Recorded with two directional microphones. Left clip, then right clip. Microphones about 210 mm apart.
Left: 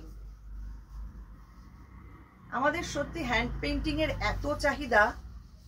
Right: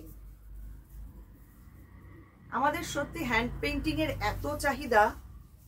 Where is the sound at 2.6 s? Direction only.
15° right (ahead or behind).